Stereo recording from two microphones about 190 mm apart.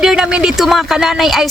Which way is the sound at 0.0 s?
5° right (ahead or behind).